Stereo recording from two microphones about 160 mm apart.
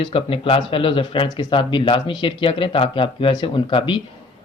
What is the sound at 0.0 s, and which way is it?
A man's voice, 35° left (ahead or behind).